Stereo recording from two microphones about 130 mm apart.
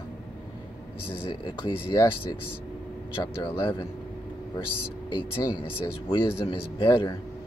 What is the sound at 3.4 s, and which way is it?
Speech, 40° left (ahead or behind).